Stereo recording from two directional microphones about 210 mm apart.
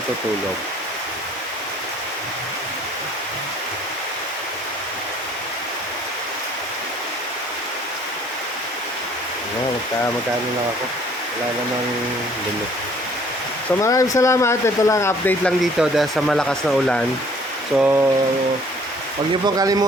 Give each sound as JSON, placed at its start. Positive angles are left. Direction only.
{"t": 13.8, "sound": "speech", "side_deg": 15}
{"t": 17.7, "sound": "speech", "side_deg": -10}
{"t": 19.3, "sound": "speech", "side_deg": -15}